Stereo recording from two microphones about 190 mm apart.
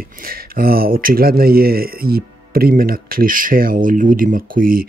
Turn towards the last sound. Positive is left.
turn(degrees=-50)  # may be behind; listen again after turning